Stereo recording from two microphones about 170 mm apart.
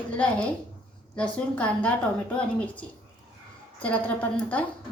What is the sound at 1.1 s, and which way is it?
A woman's voice, 5° left (ahead or behind).